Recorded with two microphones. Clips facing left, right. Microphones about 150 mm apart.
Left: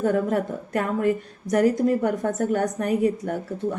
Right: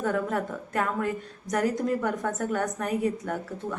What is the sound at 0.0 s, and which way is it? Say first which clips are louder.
Speech: left 5 dB; 40° left (ahead or behind).